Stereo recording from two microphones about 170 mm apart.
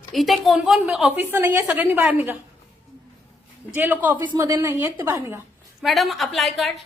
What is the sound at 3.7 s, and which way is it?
A woman's voice, 10° right (ahead or behind).